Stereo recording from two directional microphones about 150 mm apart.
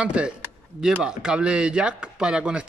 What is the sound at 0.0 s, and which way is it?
Speech, 5° right (ahead or behind).